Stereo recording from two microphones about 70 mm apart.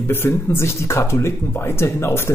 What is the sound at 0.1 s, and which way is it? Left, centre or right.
Speech, left.